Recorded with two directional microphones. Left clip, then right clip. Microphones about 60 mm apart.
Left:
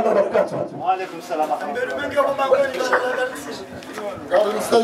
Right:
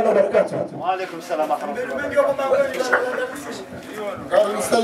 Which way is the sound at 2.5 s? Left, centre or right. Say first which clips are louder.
Left 2 dB; centre.